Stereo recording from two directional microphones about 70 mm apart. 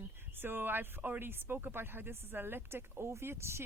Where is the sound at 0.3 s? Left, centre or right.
Right.